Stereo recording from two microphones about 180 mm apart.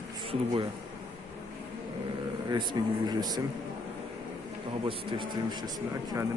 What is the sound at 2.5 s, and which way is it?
Speech, 25° right (ahead or behind).